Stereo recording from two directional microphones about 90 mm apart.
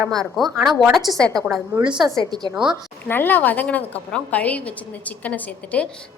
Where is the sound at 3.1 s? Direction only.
20° left (ahead or behind).